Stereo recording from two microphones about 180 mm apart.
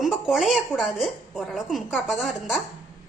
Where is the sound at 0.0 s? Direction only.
Centre (ahead or behind).